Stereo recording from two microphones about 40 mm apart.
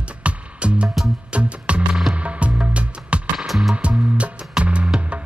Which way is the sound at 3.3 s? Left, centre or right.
Centre.